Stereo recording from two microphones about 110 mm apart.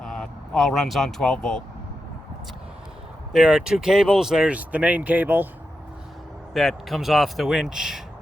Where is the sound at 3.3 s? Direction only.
5° right (ahead or behind).